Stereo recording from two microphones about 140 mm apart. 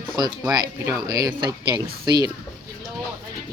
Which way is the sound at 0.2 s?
30° right (ahead or behind).